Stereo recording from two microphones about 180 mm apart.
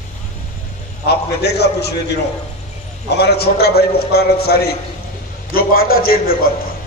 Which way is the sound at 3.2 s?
65° left (ahead or behind).